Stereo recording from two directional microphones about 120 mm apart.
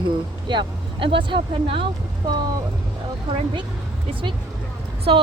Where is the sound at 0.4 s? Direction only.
45° right (ahead or behind).